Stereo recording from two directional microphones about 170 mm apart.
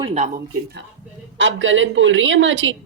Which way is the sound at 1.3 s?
90° right.